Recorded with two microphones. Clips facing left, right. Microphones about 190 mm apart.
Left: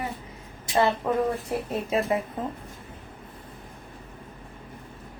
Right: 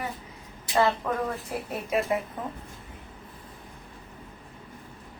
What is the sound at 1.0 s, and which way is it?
Speech, 25° left (ahead or behind).